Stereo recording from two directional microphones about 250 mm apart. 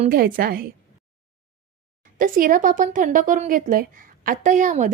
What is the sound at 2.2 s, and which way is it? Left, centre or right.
A woman's voice, right.